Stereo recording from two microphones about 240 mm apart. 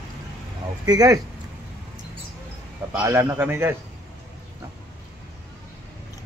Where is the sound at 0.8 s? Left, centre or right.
Centre.